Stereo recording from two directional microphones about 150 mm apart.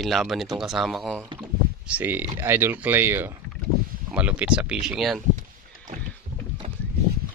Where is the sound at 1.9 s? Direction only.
10° right (ahead or behind).